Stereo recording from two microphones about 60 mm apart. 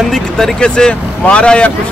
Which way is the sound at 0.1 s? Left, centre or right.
Centre.